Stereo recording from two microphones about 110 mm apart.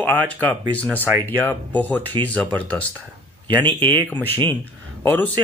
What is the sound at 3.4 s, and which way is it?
Speech, 45° right (ahead or behind).